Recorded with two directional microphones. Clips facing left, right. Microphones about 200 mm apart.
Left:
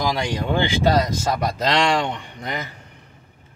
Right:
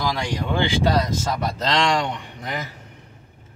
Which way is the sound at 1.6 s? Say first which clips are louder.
Left 1 dB; 10° left (ahead or behind).